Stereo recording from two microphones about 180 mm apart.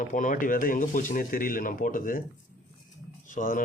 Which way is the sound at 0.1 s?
45° left (ahead or behind).